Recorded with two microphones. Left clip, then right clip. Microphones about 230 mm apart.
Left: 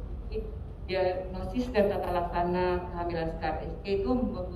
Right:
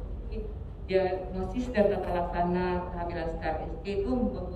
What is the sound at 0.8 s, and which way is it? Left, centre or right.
A woman's voice, centre.